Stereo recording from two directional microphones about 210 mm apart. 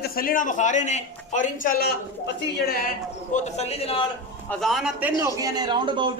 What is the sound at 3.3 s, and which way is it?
Speech, 30° left (ahead or behind).